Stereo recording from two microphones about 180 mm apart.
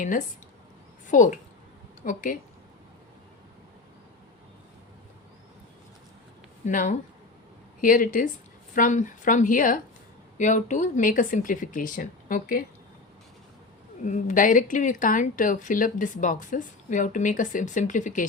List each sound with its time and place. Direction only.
0.0 s speech: 45° left (ahead or behind)
6.7 s speech: 45° left (ahead or behind)
14.0 s speech: 45° left (ahead or behind)